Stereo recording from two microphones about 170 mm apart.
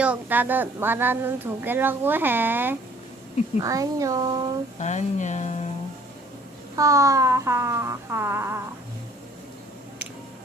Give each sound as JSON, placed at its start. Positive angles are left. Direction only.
{"t": 0.0, "sound": "a woman's voice", "side_deg": -10}
{"t": 4.8, "sound": "speech", "side_deg": 45}
{"t": 6.7, "sound": "a woman's voice", "side_deg": -20}